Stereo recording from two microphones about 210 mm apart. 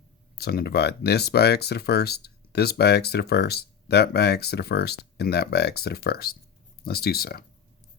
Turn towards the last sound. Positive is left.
turn(degrees=45)  # may be behind; listen again after turning